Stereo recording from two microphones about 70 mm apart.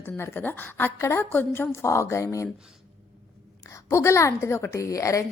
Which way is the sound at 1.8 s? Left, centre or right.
Left.